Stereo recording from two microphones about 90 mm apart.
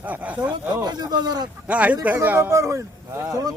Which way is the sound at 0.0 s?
15° right (ahead or behind).